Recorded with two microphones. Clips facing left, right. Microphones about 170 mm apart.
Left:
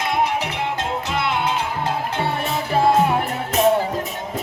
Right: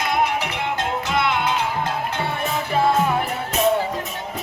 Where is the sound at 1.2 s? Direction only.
35° left (ahead or behind).